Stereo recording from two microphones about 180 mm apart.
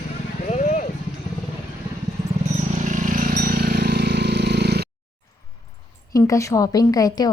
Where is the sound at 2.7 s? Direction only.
45° right (ahead or behind); by 4.9 s 65° right (ahead or behind).